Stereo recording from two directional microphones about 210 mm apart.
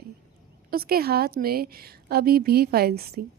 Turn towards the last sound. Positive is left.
turn(degrees=-45)  # may be behind; listen again after turning